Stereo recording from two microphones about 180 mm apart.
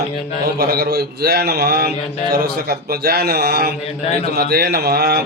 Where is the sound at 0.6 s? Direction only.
60° right (ahead or behind).